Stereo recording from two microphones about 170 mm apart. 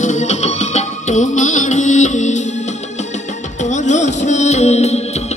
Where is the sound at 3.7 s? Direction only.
45° left (ahead or behind).